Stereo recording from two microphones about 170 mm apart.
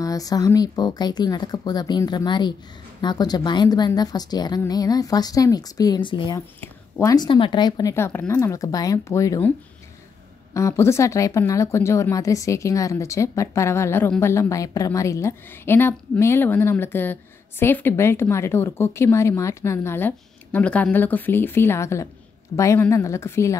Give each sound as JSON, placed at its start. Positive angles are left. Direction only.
{"t": 0.0, "sound": "a woman's voice", "side_deg": 20}
{"t": 10.5, "sound": "a woman's voice", "side_deg": 15}